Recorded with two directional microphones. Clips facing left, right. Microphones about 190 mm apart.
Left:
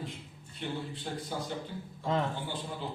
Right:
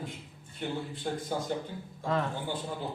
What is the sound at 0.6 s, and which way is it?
Speech, 50° right (ahead or behind).